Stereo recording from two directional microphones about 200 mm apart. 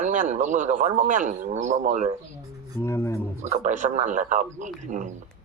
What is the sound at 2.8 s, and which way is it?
Speech, 15° left (ahead or behind).